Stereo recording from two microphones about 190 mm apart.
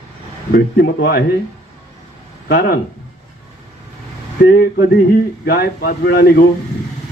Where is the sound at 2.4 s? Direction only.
55° left (ahead or behind).